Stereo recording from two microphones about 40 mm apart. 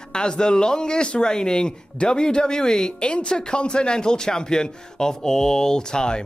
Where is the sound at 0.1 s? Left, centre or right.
Left.